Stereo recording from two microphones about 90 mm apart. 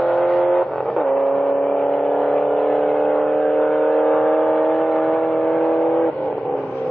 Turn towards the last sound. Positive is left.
turn(degrees=0)  # may be behind; listen again after turning